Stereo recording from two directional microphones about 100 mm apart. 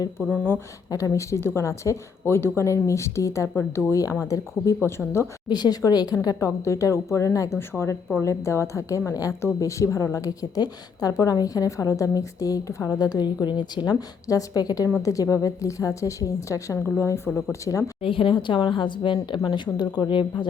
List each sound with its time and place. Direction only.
0.3 s speech: 20° left (ahead or behind)
0.9 s speech: 35° left (ahead or behind)
5.5 s a woman's voice: 45° left (ahead or behind)
13.9 s a woman's voice: 35° left (ahead or behind)
18.0 s speech: 60° left (ahead or behind)